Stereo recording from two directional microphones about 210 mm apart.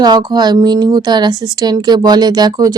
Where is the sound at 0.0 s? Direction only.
20° right (ahead or behind).